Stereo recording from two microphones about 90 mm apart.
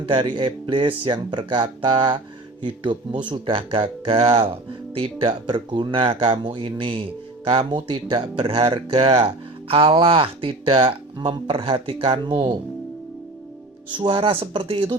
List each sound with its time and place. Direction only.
0.0 s speech: 65° right (ahead or behind)
14.0 s speech: 90° right